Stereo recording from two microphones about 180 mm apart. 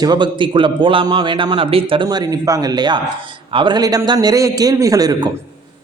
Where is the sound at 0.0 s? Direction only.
25° right (ahead or behind).